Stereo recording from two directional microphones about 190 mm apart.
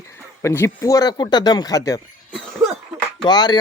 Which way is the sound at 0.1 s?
15° left (ahead or behind).